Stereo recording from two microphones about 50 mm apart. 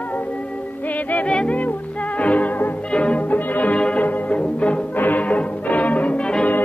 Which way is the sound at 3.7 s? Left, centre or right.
Left.